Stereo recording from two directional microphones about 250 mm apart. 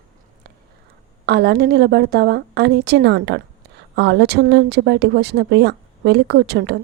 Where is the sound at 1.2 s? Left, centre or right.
Right.